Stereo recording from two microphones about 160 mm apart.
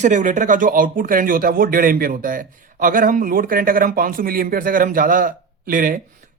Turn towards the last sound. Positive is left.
turn(degrees=-60)  # may be behind; listen again after turning